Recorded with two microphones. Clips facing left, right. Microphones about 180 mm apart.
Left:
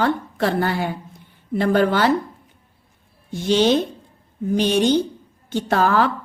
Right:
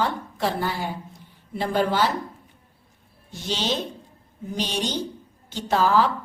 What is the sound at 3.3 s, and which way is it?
A woman's voice, 55° left (ahead or behind).